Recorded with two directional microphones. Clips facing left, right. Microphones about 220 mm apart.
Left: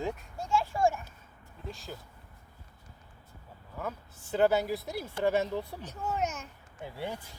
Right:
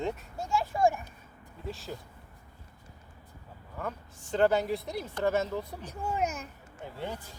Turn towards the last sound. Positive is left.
turn(degrees=10)  # may be behind; listen again after turning